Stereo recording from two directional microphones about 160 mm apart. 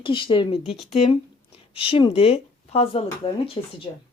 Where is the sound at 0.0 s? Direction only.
30° left (ahead or behind).